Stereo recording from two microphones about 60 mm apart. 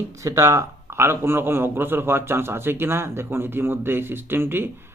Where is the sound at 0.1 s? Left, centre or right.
Right.